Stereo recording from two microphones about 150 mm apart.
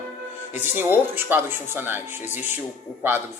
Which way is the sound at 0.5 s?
15° right (ahead or behind).